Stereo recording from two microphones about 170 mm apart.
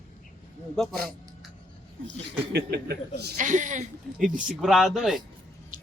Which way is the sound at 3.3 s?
45° right (ahead or behind).